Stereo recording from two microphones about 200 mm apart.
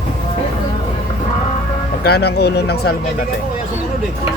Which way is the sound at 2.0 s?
55° left (ahead or behind).